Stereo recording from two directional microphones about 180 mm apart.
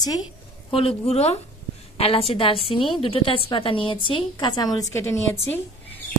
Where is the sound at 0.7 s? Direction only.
30° left (ahead or behind).